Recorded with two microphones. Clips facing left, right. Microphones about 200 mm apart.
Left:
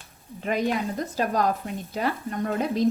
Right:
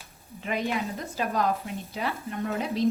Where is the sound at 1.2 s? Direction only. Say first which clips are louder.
Left 2 dB; 45° left (ahead or behind).